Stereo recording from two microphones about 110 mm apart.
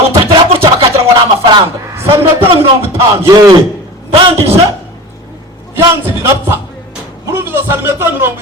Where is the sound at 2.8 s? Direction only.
25° right (ahead or behind).